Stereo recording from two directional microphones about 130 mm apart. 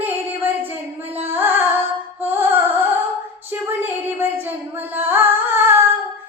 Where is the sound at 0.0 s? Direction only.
15° right (ahead or behind).